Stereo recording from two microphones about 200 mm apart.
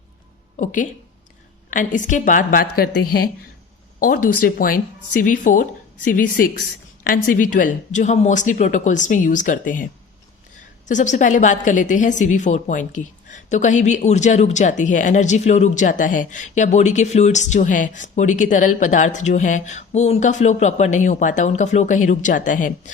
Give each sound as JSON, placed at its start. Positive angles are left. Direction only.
{"t": 0.5, "sound": "a woman's voice", "side_deg": 40}